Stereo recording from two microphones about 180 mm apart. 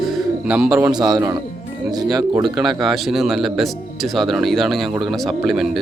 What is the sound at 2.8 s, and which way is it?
Speech, centre (ahead or behind).